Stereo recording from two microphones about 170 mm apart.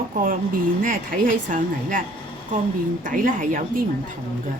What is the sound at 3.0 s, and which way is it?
Speech, 50° right (ahead or behind).